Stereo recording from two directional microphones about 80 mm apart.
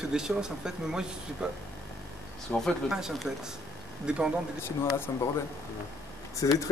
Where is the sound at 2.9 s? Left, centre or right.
Centre.